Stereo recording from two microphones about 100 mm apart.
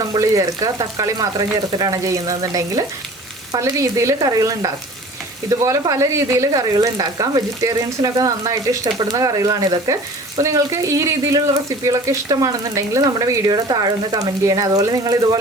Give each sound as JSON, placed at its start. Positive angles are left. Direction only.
{"t": 0.0, "sound": "speech", "side_deg": -35}